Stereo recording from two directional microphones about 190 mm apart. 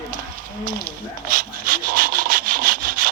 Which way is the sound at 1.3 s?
50° right (ahead or behind).